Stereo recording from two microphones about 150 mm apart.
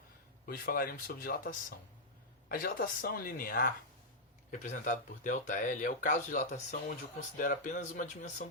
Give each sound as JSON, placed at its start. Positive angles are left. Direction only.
{"t": 0.4, "sound": "speech", "side_deg": 85}
{"t": 4.5, "sound": "speech", "side_deg": 55}